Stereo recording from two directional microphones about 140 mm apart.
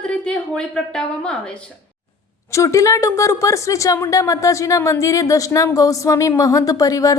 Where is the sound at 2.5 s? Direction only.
20° left (ahead or behind).